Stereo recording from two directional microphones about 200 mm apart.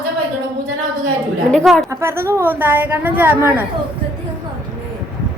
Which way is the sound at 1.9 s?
10° right (ahead or behind).